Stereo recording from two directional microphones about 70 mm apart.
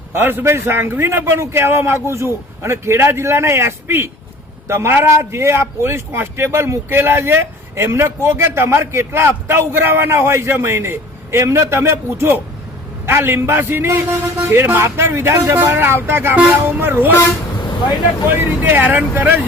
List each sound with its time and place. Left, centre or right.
0.1 s speech: right
16.3 s speech: centre
16.7 s speech: right
18.3 s speech: right